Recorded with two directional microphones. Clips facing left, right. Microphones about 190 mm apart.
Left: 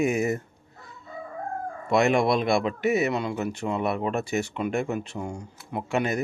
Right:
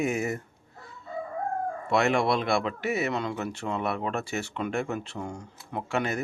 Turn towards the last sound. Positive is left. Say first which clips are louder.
# left 3 dB
turn(degrees=15)  # may be behind; listen again after turning